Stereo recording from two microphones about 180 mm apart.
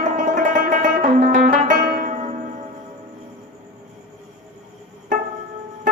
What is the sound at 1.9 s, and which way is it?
Zither, 55° right (ahead or behind).